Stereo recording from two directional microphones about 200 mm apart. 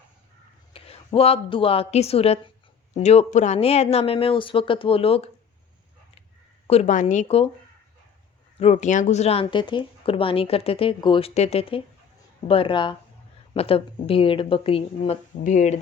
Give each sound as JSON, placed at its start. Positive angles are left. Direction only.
{"t": 0.7, "sound": "a woman's voice", "side_deg": 30}
{"t": 6.7, "sound": "a woman's voice", "side_deg": 35}
{"t": 8.5, "sound": "speech", "side_deg": 35}